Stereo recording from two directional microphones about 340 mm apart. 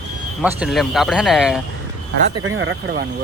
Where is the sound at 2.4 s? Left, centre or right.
Right.